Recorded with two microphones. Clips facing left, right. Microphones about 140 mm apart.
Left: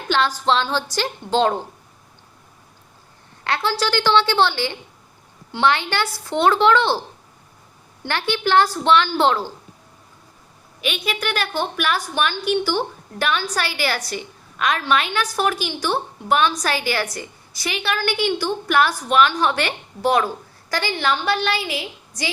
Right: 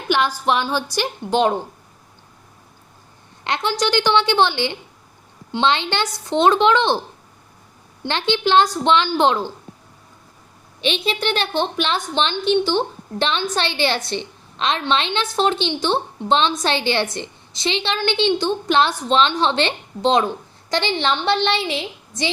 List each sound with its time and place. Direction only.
0.1 s a woman's voice: 15° right (ahead or behind)
3.4 s a woman's voice: 20° right (ahead or behind)
8.0 s a woman's voice: 20° right (ahead or behind)
10.8 s a woman's voice: 25° right (ahead or behind)